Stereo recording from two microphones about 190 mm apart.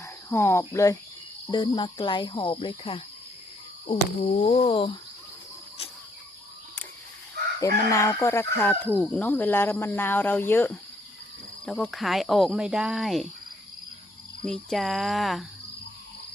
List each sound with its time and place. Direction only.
0.0 s speech: 15° left (ahead or behind)
3.8 s a sound: 35° left (ahead or behind)
7.6 s speech: 15° left (ahead or behind); by 13.2 s centre (ahead or behind)
14.4 s speech: centre (ahead or behind)